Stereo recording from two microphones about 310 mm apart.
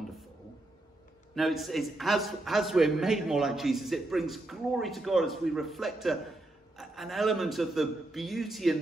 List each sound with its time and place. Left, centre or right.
1.3 s a man's voice: centre